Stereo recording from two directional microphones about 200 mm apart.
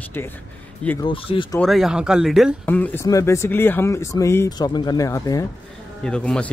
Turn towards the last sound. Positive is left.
turn(degrees=5)  # may be behind; listen again after turning